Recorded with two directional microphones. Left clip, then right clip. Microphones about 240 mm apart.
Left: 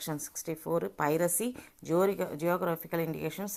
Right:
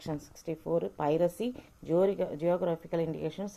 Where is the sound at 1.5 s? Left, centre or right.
Centre.